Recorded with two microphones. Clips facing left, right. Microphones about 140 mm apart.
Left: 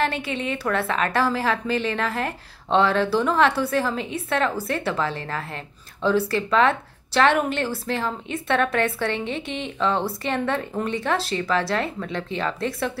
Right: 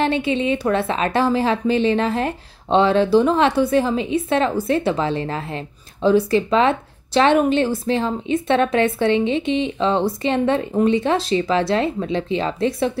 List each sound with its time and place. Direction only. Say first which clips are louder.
0.0 s speech: right 6 dB; 20° right (ahead or behind)